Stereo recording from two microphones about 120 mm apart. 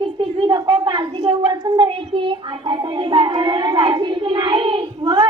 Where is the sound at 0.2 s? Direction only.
45° right (ahead or behind).